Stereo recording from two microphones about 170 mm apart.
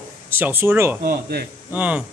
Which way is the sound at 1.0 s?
65° right (ahead or behind).